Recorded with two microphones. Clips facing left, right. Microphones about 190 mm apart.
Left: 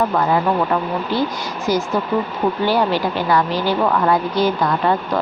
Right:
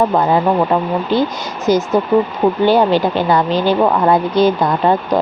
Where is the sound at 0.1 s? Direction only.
25° right (ahead or behind).